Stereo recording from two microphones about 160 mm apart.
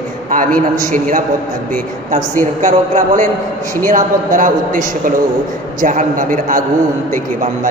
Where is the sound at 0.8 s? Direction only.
55° right (ahead or behind).